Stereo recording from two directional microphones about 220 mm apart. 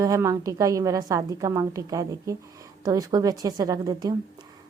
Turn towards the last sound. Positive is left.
turn(degrees=-15)  # may be behind; listen again after turning